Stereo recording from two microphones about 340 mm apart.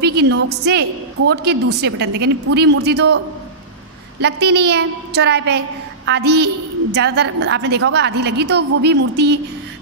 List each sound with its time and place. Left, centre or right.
0.0 s a woman's voice: right
4.2 s a woman's voice: right